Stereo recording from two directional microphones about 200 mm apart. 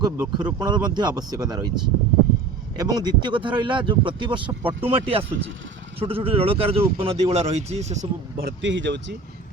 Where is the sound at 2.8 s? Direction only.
20° right (ahead or behind).